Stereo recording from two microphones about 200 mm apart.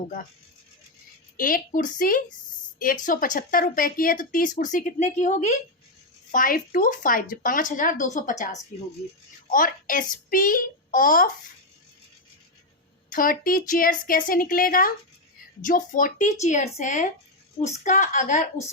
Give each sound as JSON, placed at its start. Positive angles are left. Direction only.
{"t": 1.4, "sound": "speech", "side_deg": 45}
{"t": 13.1, "sound": "speech", "side_deg": 45}